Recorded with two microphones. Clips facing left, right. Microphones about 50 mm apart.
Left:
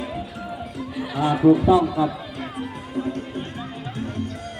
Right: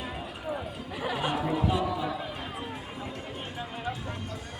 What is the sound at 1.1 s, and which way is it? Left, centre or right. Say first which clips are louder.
Speech: left 13 dB; left.